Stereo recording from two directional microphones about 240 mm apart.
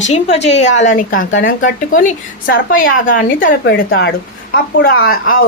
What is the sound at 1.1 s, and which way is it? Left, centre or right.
Speech, left.